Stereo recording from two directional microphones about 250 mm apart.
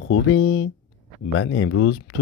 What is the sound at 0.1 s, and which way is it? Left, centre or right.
Speech, left.